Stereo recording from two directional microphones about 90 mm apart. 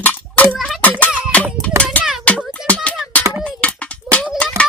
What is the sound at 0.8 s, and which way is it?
Music, 15° left (ahead or behind).